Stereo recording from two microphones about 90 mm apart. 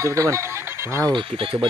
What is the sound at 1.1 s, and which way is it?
Speech, 65° right (ahead or behind).